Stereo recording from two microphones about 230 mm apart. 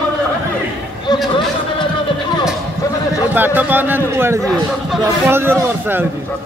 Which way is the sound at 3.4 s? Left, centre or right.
Centre.